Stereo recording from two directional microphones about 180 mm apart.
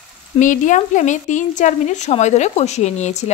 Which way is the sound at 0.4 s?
45° left (ahead or behind).